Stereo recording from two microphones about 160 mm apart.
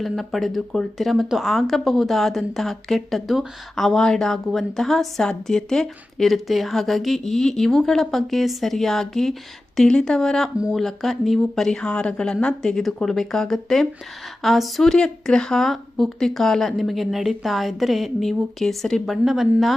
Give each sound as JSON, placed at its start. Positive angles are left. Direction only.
{"t": 0.0, "sound": "speech", "side_deg": 0}